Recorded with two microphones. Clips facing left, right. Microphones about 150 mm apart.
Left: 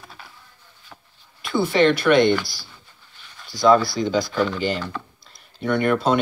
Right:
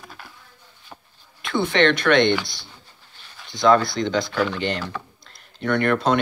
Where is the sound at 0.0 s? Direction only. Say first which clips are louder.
Right 1 dB; centre (ahead or behind).